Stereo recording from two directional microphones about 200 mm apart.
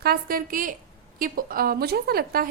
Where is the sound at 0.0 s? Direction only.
50° right (ahead or behind).